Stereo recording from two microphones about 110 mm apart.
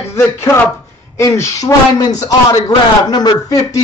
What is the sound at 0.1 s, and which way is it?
Speech, 25° left (ahead or behind).